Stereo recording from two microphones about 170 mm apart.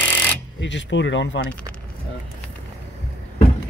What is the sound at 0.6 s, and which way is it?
Speech, 90° left.